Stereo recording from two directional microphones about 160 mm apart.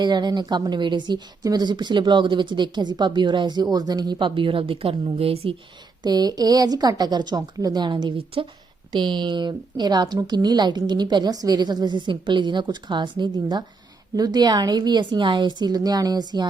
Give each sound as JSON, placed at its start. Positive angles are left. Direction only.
{"t": 0.0, "sound": "a woman's voice", "side_deg": -25}
{"t": 6.0, "sound": "a woman's voice", "side_deg": -25}